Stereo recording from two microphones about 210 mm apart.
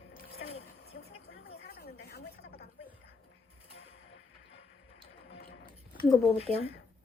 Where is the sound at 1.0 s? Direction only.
50° left (ahead or behind).